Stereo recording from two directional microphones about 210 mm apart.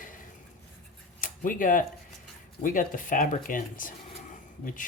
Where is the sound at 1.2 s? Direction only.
40° left (ahead or behind).